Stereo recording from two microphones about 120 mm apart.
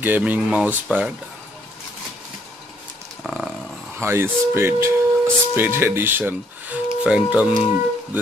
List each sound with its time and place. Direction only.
0.0 s speech: 15° right (ahead or behind)
3.3 s dog: 5° right (ahead or behind)
4.0 s speech: 20° right (ahead or behind)